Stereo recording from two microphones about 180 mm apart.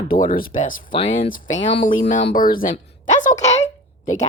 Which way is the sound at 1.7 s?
35° left (ahead or behind).